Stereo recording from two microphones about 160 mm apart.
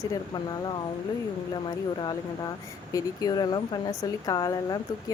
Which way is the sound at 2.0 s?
25° left (ahead or behind).